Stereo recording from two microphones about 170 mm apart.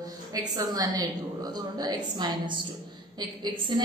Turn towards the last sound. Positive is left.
turn(degrees=-25)  # may be behind; listen again after turning